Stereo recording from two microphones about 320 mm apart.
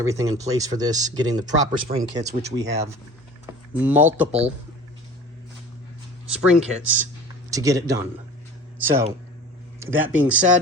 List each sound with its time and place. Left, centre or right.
0.0 s speech: centre
4.3 s speech: centre
6.3 s speech: centre